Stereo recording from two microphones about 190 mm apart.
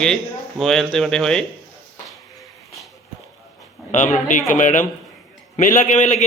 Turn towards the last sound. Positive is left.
turn(degrees=40)  # may be behind; listen again after turning